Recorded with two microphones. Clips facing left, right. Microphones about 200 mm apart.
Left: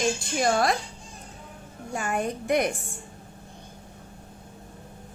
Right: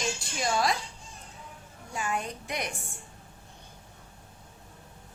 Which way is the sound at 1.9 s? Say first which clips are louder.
Left 5 dB; 55° left (ahead or behind).